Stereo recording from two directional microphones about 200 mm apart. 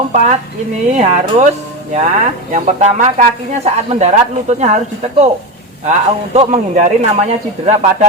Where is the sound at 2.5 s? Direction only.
40° right (ahead or behind).